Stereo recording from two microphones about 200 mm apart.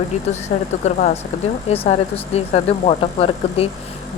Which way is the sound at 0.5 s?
35° left (ahead or behind).